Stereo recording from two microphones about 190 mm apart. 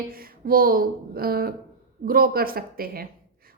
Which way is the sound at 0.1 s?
50° right (ahead or behind).